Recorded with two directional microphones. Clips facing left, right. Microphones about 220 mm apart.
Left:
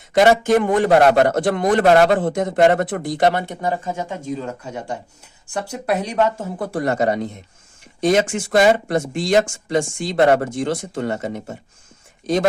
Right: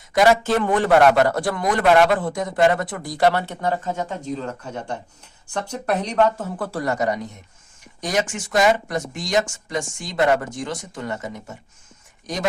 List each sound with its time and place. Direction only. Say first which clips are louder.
0.1 s speech: left 3 dB; 25° left (ahead or behind)
0.9 s speech: even; 35° left (ahead or behind)
1.8 s speech: left 2 dB; 40° left (ahead or behind)
2.1 s speech: left 4 dB; 25° left (ahead or behind)
6.6 s speech: left 6 dB; 25° left (ahead or behind)